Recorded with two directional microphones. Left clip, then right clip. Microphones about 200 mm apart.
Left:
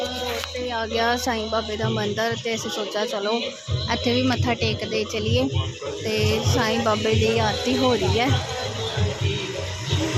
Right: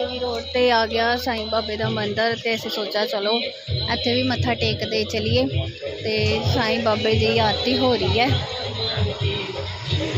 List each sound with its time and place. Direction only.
0.6 s speech: 45° right (ahead or behind)
0.9 s speech: 5° left (ahead or behind)